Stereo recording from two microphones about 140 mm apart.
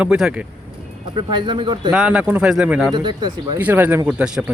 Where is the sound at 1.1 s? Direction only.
35° right (ahead or behind).